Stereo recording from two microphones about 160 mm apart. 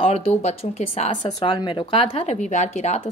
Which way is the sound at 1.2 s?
30° left (ahead or behind).